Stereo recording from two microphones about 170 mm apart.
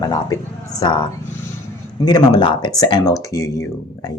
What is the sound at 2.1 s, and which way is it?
Speech, 25° left (ahead or behind).